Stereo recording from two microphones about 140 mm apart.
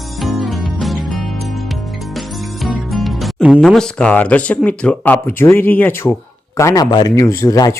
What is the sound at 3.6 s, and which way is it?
Speech, 5° left (ahead or behind).